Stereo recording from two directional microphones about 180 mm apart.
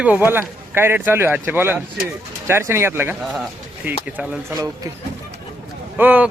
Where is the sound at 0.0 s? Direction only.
10° right (ahead or behind).